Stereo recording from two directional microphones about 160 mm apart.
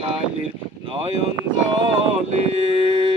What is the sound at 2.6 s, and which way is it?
Speech, 40° right (ahead or behind).